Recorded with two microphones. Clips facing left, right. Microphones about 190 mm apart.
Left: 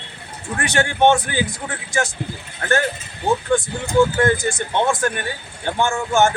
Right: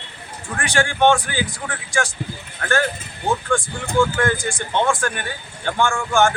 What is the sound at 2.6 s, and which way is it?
Speech, 30° left (ahead or behind).